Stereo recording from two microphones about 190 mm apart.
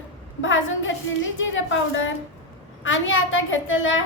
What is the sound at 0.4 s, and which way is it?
A woman's voice, 85° left.